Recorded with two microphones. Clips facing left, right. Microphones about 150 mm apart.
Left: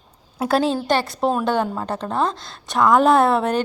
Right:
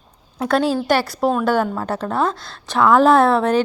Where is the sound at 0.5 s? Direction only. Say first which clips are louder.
Right 2 dB; 30° left (ahead or behind).